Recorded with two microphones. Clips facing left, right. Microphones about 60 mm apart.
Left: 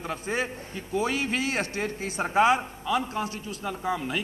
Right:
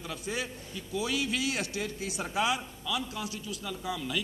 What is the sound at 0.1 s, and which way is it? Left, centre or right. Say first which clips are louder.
A man's voice: left 6 dB; left.